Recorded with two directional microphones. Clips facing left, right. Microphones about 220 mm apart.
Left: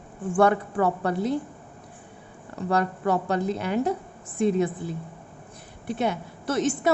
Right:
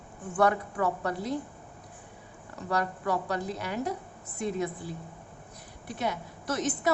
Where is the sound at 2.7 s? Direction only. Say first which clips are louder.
Left 5 dB; 25° left (ahead or behind).